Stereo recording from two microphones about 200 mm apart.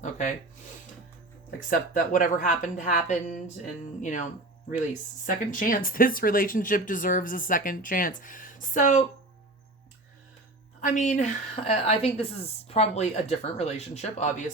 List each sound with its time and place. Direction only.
0.0 s a sound: 40° left (ahead or behind)
1.5 s a woman's voice: 40° left (ahead or behind)
10.8 s a woman's voice: 40° left (ahead or behind)